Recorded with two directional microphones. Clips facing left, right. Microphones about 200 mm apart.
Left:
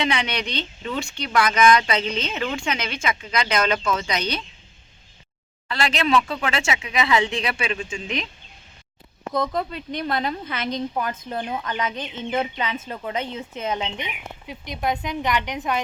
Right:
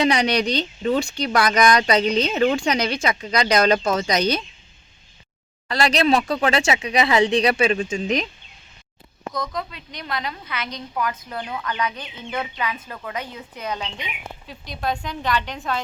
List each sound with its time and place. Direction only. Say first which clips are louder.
0.0 s speech: right 6 dB; 40° right (ahead or behind)
5.6 s speech: right 4 dB; 40° right (ahead or behind)
9.5 s speech: left 4 dB; 35° left (ahead or behind)
9.9 s a woman's voice: left 6 dB; 50° left (ahead or behind)
10.4 s speech: left 5 dB; 25° left (ahead or behind)